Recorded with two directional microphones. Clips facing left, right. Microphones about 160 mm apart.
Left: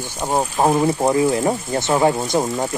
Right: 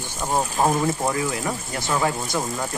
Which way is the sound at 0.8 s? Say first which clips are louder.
Left 7 dB; 25° left (ahead or behind).